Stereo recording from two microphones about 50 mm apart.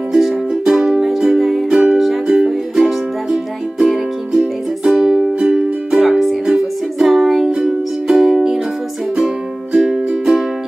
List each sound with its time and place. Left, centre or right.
0.1 s music: centre
2.2 s music: centre
9.7 s music: centre